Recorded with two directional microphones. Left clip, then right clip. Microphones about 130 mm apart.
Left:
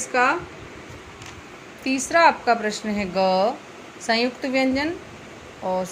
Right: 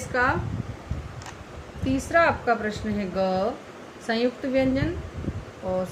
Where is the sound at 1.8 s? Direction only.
35° left (ahead or behind).